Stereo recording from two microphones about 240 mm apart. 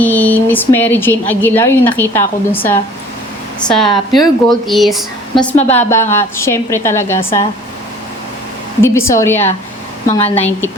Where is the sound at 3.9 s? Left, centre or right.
Centre.